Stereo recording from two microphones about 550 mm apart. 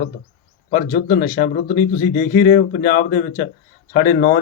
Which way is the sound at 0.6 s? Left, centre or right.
Centre.